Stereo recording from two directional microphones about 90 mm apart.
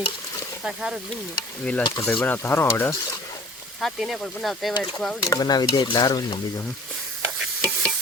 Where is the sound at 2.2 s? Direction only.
25° left (ahead or behind).